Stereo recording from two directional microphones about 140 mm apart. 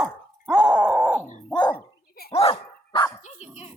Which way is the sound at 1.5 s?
30° left (ahead or behind).